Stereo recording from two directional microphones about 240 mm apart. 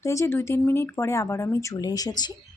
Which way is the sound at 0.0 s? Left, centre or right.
Centre.